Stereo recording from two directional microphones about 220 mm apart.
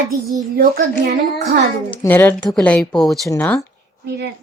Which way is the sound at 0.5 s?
45° right (ahead or behind).